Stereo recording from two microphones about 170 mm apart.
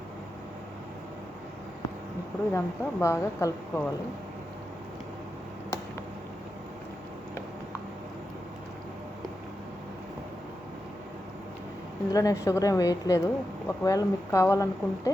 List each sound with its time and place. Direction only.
2.5 s speech: 15° left (ahead or behind)
12.1 s speech: 20° left (ahead or behind)